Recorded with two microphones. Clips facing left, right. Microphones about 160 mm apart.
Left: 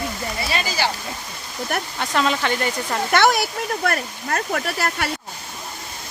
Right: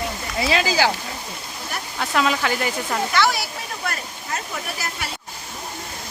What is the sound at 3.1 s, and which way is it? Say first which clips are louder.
Speech: left 6 dB; 55° left (ahead or behind).